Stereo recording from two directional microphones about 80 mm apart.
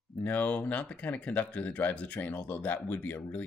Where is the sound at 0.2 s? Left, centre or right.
Left.